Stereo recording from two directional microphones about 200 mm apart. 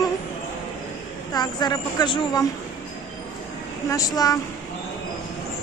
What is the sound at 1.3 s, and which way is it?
Speech, 20° left (ahead or behind).